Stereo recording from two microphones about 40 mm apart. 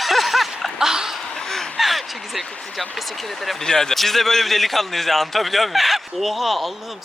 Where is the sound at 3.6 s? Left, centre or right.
Centre.